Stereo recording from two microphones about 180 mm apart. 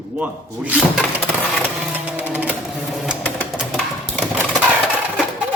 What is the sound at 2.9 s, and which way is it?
Sewing machine, centre (ahead or behind).